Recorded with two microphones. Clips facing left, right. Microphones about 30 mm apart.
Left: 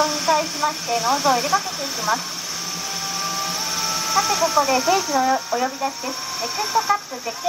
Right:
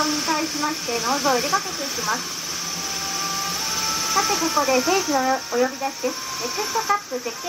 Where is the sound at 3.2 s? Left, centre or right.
Left.